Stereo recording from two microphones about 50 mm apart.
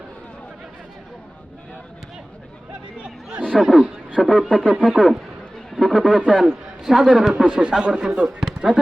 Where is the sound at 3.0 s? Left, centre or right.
Right.